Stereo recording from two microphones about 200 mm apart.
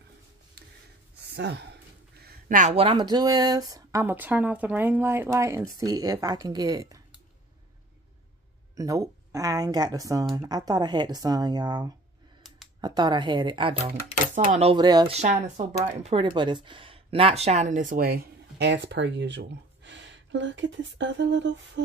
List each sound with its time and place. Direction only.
0.6 s a sound: 55° right (ahead or behind)
1.2 s speech: 55° right (ahead or behind)
2.1 s a sound: 45° right (ahead or behind)
2.7 s speech: 25° right (ahead or behind)
8.7 s speech: 15° right (ahead or behind)
15.1 s speech: 35° right (ahead or behind); by 21.8 s 60° right (ahead or behind)